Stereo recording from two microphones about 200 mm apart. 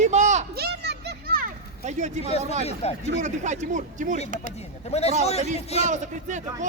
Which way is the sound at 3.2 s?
35° right (ahead or behind).